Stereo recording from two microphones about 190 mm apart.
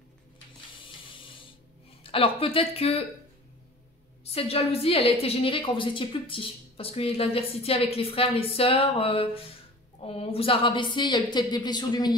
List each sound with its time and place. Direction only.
0.7 s a sound: 25° left (ahead or behind)
2.0 s speech: 30° left (ahead or behind)
4.2 s a woman's voice: 30° left (ahead or behind)